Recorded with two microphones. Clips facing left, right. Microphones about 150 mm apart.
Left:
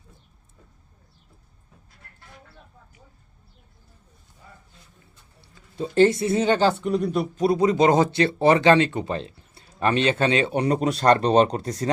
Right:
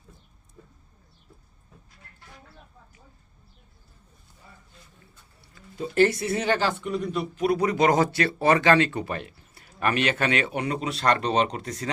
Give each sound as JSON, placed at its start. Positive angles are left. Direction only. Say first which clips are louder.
{"t": 5.4, "sound": "speech", "louder": "left 3 dB", "side_deg": 25}
{"t": 6.7, "sound": "a man's voice", "louder": "left 6 dB", "side_deg": 40}
{"t": 7.5, "sound": "speech", "louder": "left 3 dB", "side_deg": 25}